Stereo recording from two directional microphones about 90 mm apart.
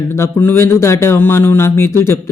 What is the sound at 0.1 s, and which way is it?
Speech, 25° left (ahead or behind).